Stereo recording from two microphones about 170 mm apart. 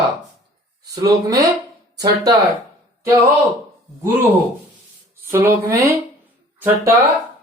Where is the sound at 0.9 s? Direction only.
20° right (ahead or behind).